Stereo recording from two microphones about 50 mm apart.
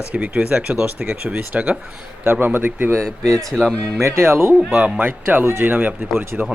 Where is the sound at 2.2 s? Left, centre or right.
Right.